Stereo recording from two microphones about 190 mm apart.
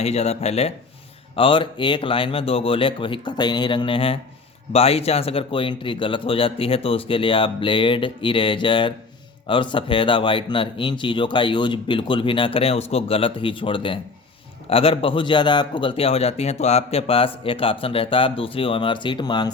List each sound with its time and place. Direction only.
0.0 s a man's voice: 35° left (ahead or behind)